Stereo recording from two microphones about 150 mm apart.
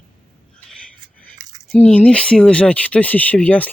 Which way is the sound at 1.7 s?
10° left (ahead or behind).